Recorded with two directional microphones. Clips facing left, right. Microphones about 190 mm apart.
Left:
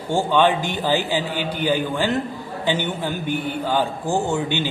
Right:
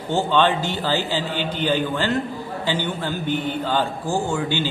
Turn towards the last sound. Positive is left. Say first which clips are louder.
# left 1 dB
turn(degrees=20)  # may be behind; listen again after turning